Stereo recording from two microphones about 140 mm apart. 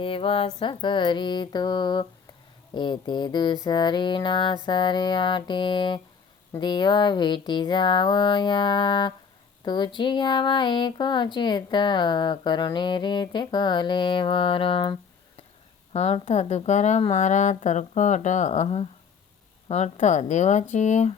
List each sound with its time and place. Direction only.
0.0 s speech: 40° left (ahead or behind); by 21.1 s 55° left (ahead or behind)